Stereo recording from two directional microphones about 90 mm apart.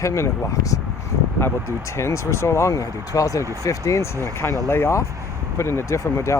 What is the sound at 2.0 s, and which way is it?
Speech, 35° left (ahead or behind).